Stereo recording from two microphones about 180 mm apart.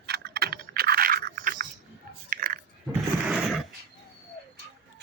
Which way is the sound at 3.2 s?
Centre (ahead or behind).